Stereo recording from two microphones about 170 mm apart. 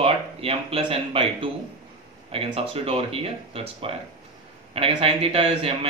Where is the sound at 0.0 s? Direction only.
35° right (ahead or behind).